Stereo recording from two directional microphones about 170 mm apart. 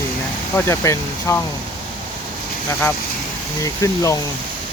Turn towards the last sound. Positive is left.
turn(degrees=20)  # may be behind; listen again after turning